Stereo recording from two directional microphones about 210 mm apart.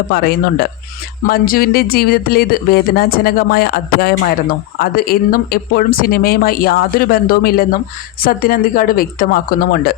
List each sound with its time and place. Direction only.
0.1 s speech: 50° left (ahead or behind)